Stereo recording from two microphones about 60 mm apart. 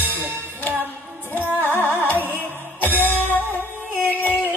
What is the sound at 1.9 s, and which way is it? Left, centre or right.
Music, left.